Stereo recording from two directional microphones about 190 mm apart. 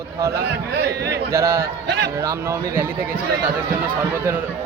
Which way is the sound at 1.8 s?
65° right (ahead or behind).